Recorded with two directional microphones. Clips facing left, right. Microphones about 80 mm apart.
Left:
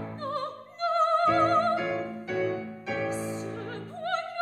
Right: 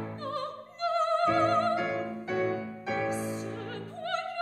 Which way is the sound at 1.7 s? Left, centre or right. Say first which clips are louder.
Left 1 dB; centre.